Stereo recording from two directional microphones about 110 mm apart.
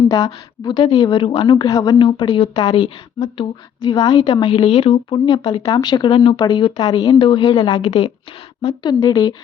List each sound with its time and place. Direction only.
0.1 s a woman's voice: 30° left (ahead or behind)
0.7 s speech: 45° left (ahead or behind)
1.5 s a woman's voice: 35° left (ahead or behind)
2.0 s a woman's voice: 50° left (ahead or behind)